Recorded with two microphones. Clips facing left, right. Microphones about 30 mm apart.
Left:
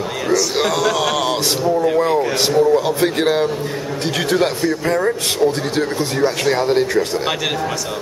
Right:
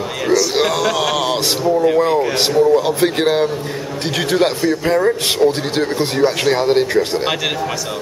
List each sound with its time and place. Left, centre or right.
0.3 s a man's voice: centre